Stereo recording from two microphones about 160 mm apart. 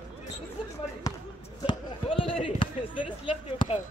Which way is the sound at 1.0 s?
25° left (ahead or behind).